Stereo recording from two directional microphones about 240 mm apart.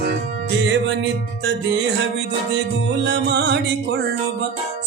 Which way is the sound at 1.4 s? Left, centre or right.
Right.